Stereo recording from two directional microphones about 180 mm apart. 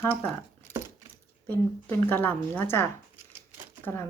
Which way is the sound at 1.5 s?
10° left (ahead or behind).